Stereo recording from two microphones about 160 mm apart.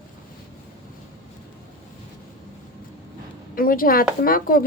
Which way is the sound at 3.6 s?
60° left (ahead or behind).